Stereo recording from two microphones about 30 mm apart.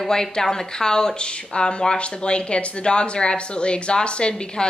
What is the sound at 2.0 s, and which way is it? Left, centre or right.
A woman's voice, left.